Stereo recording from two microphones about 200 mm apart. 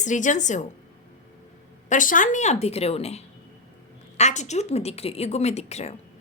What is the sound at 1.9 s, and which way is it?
A woman's voice, 40° left (ahead or behind).